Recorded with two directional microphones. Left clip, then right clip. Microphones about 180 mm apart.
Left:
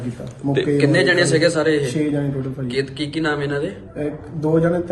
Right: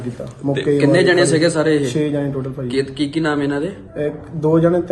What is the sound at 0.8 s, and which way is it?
A man's voice, 45° right (ahead or behind).